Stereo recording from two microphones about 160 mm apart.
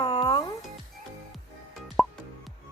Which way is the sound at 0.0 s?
30° left (ahead or behind).